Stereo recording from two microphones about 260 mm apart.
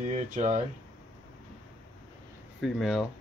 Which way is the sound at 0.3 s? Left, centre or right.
Right.